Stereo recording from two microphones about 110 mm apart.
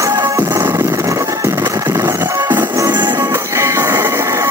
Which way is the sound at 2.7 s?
35° right (ahead or behind).